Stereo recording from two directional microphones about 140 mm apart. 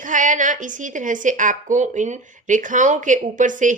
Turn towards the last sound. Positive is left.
turn(degrees=-65)  # may be behind; listen again after turning